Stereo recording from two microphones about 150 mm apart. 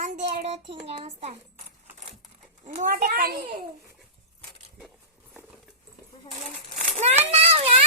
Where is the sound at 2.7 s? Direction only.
65° right (ahead or behind); by 3.5 s 90° right.